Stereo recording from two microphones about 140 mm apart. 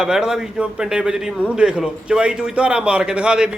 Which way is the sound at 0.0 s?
5° right (ahead or behind).